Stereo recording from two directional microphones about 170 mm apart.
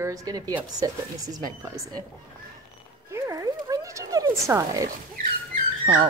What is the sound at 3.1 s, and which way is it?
Speech, 20° right (ahead or behind).